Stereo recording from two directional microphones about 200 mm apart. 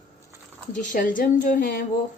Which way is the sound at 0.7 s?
40° left (ahead or behind).